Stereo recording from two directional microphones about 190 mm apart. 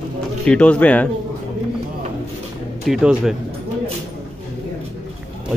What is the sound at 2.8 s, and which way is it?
Speech, centre (ahead or behind).